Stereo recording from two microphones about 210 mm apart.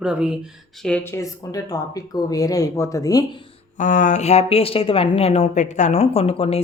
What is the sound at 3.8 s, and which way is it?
A woman's voice, 35° left (ahead or behind).